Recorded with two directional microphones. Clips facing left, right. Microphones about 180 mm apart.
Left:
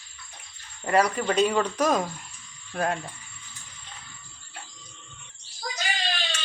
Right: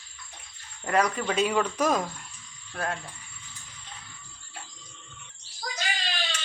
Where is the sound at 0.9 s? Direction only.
5° left (ahead or behind).